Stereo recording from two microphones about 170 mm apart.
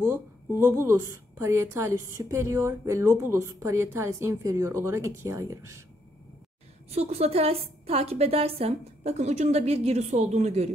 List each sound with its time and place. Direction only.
0.7 s a woman's voice: 15° right (ahead or behind)
6.9 s a woman's voice: 40° right (ahead or behind)